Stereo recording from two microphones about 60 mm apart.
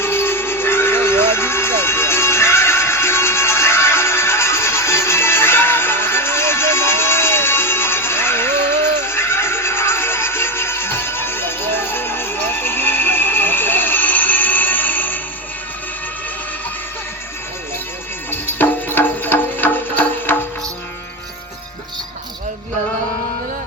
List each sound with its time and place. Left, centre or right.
0.0 s music: left
18.3 s music: left